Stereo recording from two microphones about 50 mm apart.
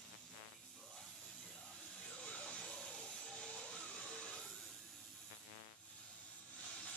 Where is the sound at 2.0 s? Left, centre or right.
Centre.